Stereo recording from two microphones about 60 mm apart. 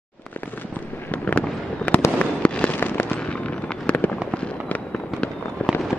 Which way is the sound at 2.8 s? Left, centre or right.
Left.